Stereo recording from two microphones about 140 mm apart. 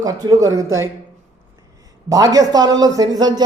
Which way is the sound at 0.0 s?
25° right (ahead or behind).